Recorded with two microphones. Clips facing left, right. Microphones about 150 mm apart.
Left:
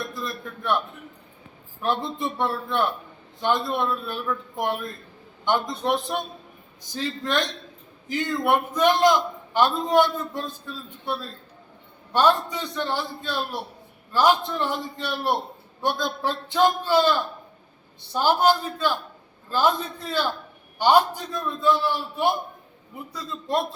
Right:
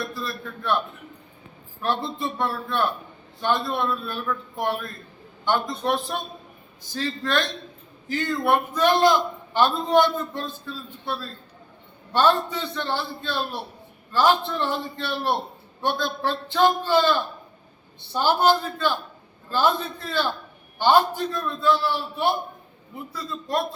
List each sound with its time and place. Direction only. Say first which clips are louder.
0.1 s a man's voice: even; 15° left (ahead or behind)
1.8 s a man's voice: even; 15° left (ahead or behind)